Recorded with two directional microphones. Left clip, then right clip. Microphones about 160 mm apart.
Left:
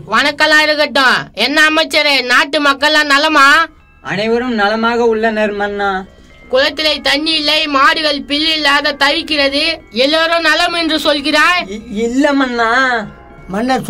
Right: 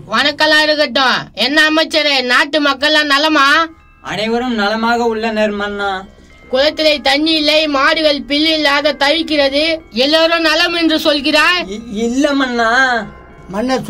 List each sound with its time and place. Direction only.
0.1 s a woman's voice: 35° left (ahead or behind)
4.1 s a man's voice: 15° right (ahead or behind)
6.5 s a woman's voice: 30° left (ahead or behind)
9.9 s a man's voice: 15° left (ahead or behind)
13.5 s a woman's voice: 40° left (ahead or behind)